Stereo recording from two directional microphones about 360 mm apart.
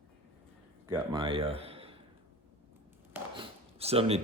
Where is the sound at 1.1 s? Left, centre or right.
Centre.